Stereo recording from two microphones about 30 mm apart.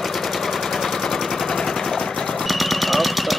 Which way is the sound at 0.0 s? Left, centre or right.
Centre.